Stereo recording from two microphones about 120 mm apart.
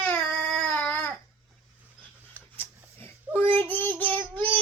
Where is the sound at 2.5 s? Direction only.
20° left (ahead or behind).